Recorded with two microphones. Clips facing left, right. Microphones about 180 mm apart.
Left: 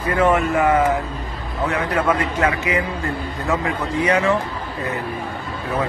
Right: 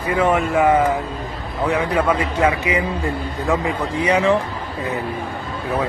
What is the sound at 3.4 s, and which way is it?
Speech, 15° right (ahead or behind).